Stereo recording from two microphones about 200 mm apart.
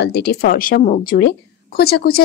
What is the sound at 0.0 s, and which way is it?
A woman's voice, 55° left (ahead or behind).